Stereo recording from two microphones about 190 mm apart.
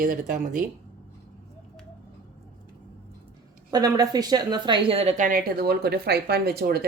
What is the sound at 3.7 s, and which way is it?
A woman's voice, 20° right (ahead or behind).